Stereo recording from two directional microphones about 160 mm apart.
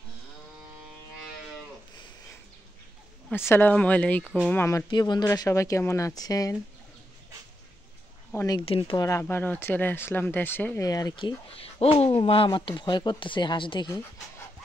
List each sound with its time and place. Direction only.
3.4 s speech: 15° left (ahead or behind)
8.4 s speech: 25° left (ahead or behind)
8.6 s speech: 35° left (ahead or behind)
8.9 s speech: 20° left (ahead or behind)